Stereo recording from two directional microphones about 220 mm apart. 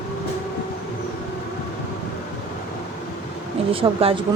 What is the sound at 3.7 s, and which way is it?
Speech, 25° right (ahead or behind).